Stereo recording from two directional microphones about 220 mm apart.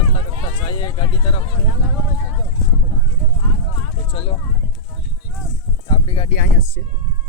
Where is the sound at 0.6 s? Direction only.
20° left (ahead or behind).